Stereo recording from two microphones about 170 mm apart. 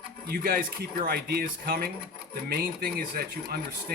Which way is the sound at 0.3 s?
60° right (ahead or behind).